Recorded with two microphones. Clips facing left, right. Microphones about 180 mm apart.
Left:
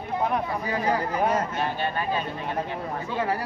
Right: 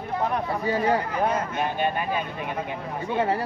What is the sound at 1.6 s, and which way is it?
Speech, 15° right (ahead or behind).